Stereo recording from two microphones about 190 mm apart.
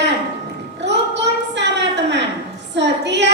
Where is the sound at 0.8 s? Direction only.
65° right (ahead or behind).